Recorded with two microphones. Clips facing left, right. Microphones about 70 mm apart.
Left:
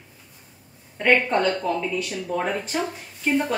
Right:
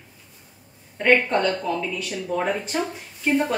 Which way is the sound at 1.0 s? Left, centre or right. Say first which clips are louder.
Even; centre.